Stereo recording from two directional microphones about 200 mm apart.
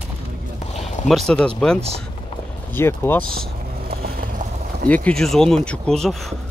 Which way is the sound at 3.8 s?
50° right (ahead or behind).